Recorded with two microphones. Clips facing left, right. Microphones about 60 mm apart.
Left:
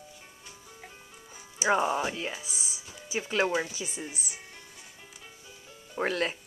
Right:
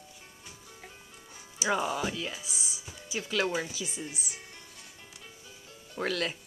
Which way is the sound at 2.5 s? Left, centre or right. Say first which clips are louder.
Even; left.